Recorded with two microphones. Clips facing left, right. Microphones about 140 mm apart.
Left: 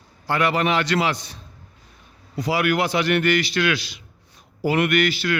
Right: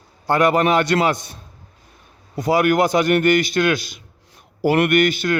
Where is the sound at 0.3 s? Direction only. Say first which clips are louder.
Right 5 dB; 45° right (ahead or behind).